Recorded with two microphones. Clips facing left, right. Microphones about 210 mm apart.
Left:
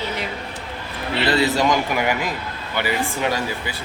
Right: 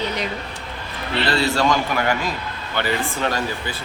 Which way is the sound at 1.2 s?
20° left (ahead or behind).